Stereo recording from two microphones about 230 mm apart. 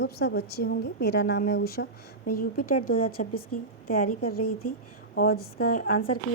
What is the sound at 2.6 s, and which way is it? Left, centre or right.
Speech, left.